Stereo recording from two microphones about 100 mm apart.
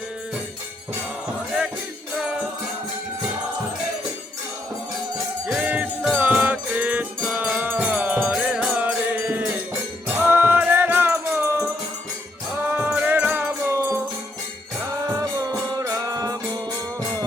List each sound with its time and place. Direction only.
5.5 s music: 10° right (ahead or behind)
15.2 s music: 40° right (ahead or behind)